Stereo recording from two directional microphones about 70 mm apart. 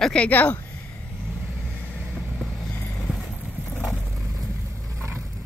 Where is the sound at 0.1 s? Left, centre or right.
Left.